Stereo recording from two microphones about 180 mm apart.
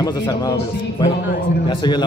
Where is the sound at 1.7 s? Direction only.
25° left (ahead or behind).